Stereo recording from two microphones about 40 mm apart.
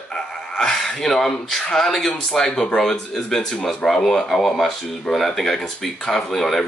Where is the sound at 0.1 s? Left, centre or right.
Centre.